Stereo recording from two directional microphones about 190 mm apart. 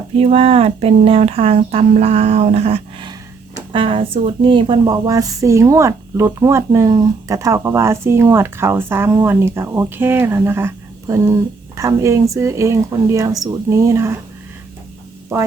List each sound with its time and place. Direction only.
0.2 s speech: 30° right (ahead or behind); by 14.2 s 15° right (ahead or behind)